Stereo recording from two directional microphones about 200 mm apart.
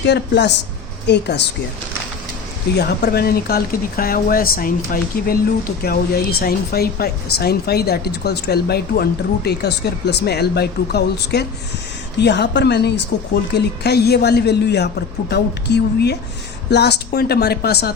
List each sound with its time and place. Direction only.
0.0 s speech: 60° left (ahead or behind)
2.7 s speech: 55° left (ahead or behind)